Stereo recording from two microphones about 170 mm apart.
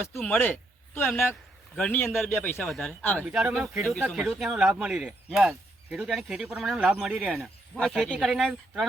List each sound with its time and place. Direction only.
0.2 s speech: 10° left (ahead or behind)
3.2 s speech: 5° right (ahead or behind)